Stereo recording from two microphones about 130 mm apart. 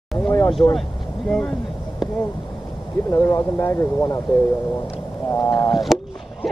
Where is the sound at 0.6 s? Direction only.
25° left (ahead or behind).